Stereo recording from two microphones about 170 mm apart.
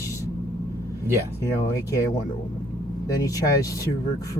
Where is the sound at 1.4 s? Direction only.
15° left (ahead or behind).